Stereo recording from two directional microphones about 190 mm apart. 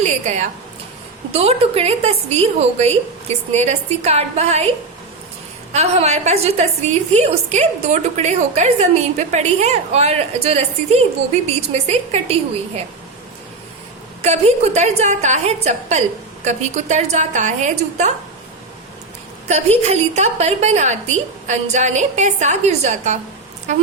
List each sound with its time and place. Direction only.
0.0 s a woman's voice: 40° right (ahead or behind)
5.7 s a woman's voice: 35° right (ahead or behind)
14.2 s a woman's voice: 35° right (ahead or behind)
19.5 s a woman's voice: 35° right (ahead or behind)